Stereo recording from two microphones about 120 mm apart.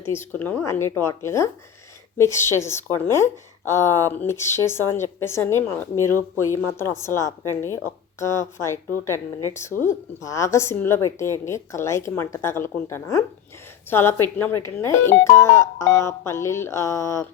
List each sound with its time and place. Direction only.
0.0 s a woman's voice: 20° left (ahead or behind)